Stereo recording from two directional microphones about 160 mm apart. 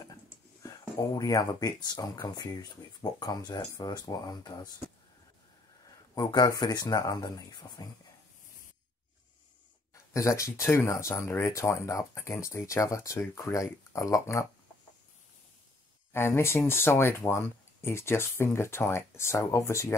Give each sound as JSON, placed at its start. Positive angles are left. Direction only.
{"t": 0.6, "sound": "speech", "side_deg": 25}
{"t": 6.1, "sound": "speech", "side_deg": 25}
{"t": 10.1, "sound": "speech", "side_deg": 20}
{"t": 16.1, "sound": "speech", "side_deg": 15}